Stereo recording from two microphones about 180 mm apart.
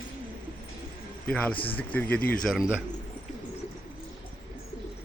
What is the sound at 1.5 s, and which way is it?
Speech, 30° left (ahead or behind).